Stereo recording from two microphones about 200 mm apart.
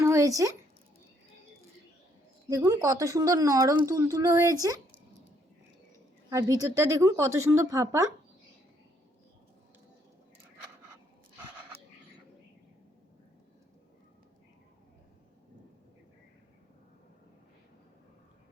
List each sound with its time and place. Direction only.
0.0 s a sound: 15° right (ahead or behind)
2.5 s speech: 15° right (ahead or behind)
6.3 s speech: 15° right (ahead or behind)